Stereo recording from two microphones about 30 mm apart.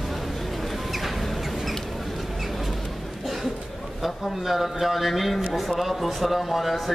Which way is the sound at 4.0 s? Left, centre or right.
Centre.